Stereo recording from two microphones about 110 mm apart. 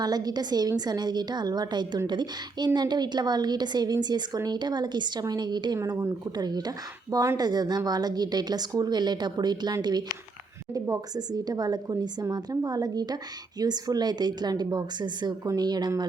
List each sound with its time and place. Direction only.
0.0 s a woman's voice: 35° right (ahead or behind)
10.8 s speech: 25° right (ahead or behind)
11.3 s a woman's voice: 35° right (ahead or behind)